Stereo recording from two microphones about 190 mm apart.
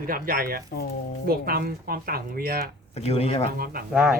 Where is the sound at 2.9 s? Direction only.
35° left (ahead or behind).